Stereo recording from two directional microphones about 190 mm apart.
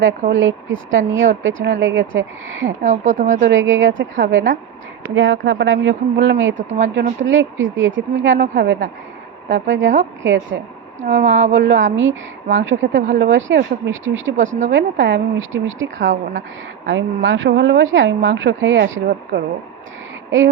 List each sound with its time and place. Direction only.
0.0 s speech: 80° right
2.8 s speech: 40° right (ahead or behind)
3.4 s a woman's voice: 90° right
5.4 s speech: 75° right (ahead or behind)
6.6 s speech: 40° right (ahead or behind)
7.2 s speech: 90° right; by 8.9 s 65° right (ahead or behind)
9.5 s speech: 80° right
14.7 s speech: 75° right (ahead or behind)
16.8 s speech: 70° right (ahead or behind); by 19.0 s 90° right
19.0 s speech: 60° right (ahead or behind)